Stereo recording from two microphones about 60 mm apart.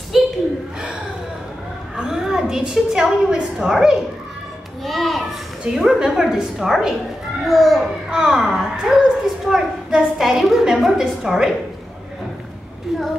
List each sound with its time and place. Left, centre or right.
0.1 s a sound: centre
2.0 s a woman's voice: centre
4.8 s a child's voice: centre
5.8 s a child's voice: centre
8.1 s speech: centre